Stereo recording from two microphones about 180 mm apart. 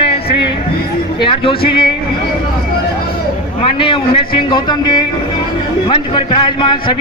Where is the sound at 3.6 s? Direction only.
30° left (ahead or behind).